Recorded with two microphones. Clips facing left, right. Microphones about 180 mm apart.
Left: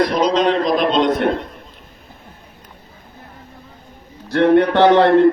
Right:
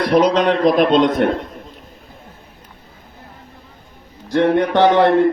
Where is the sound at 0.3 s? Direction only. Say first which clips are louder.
Right 2 dB; 55° right (ahead or behind).